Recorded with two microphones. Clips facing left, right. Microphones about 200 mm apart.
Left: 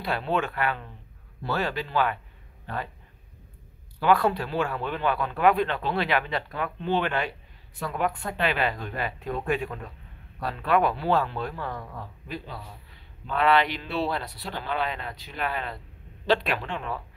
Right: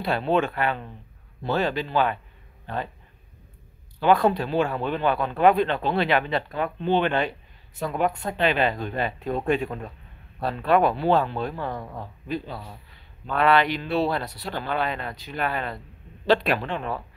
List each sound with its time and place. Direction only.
0.0 s speech: 25° right (ahead or behind)
4.0 s speech: 20° right (ahead or behind)
13.3 s speech: 50° right (ahead or behind)